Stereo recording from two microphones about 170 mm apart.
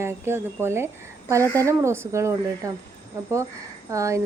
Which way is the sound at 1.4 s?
15° left (ahead or behind).